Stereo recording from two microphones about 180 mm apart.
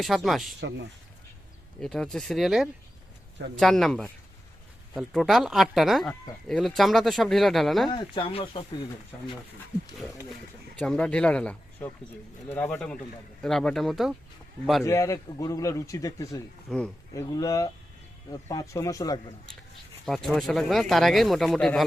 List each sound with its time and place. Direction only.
0.0 s speech: centre (ahead or behind)
1.8 s speech: 5° left (ahead or behind)
7.9 s speech: 25° left (ahead or behind)
10.8 s a man's voice: 5° left (ahead or behind)
14.8 s a man's voice: 15° left (ahead or behind)
16.6 s speech: 5° left (ahead or behind)
17.2 s speech: 20° left (ahead or behind)
20.1 s speech: centre (ahead or behind)